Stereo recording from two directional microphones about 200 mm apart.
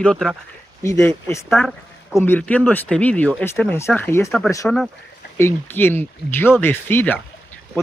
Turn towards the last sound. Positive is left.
turn(degrees=10)  # may be behind; listen again after turning